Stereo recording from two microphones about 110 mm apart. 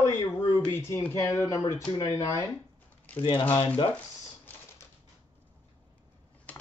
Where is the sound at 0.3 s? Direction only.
20° left (ahead or behind).